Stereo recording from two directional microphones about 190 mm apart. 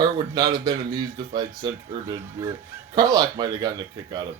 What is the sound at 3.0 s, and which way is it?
Speech, 20° right (ahead or behind).